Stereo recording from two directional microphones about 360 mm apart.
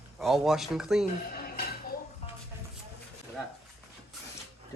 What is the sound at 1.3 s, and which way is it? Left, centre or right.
Dishes, left.